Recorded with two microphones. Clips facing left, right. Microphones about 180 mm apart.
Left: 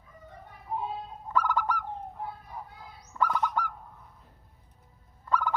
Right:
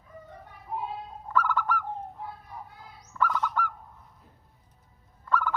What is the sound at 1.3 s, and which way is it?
Bird, 15° left (ahead or behind).